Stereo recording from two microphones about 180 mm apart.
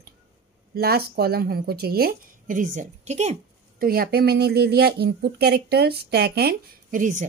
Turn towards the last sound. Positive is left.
turn(degrees=-45)  # may be behind; listen again after turning